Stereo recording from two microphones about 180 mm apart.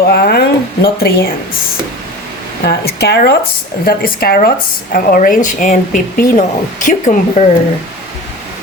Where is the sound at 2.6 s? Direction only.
65° left (ahead or behind); by 7.4 s 45° left (ahead or behind).